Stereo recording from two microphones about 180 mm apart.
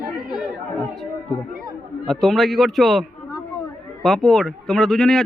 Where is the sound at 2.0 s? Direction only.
Centre (ahead or behind).